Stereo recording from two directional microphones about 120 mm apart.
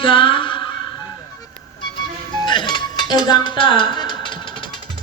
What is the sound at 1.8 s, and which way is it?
Music, 40° left (ahead or behind).